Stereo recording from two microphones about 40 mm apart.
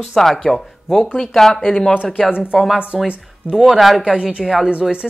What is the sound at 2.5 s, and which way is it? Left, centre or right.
Speech, centre.